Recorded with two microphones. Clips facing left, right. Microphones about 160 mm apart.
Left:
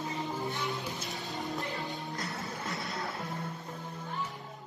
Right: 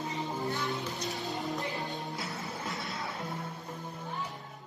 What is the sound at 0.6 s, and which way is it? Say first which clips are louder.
Music: right 2 dB; centre (ahead or behind).